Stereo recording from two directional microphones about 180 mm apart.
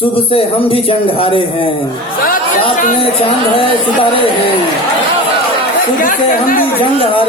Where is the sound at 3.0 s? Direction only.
30° left (ahead or behind).